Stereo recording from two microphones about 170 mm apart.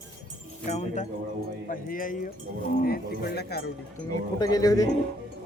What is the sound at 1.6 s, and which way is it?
Speech, 55° left (ahead or behind).